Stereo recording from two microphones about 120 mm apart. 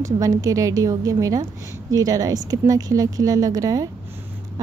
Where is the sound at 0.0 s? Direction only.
25° right (ahead or behind).